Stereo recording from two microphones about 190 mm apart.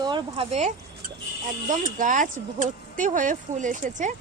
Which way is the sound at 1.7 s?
45° right (ahead or behind).